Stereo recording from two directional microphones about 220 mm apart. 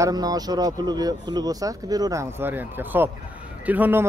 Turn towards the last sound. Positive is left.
turn(degrees=-10)  # may be behind; listen again after turning